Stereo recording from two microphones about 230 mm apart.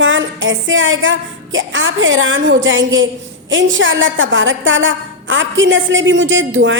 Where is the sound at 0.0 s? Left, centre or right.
Right.